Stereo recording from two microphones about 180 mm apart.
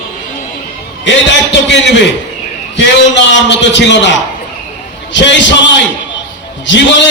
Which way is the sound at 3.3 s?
85° left.